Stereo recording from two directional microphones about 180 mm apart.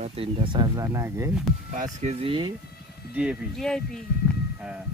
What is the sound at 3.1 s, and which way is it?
Speech, 5° right (ahead or behind).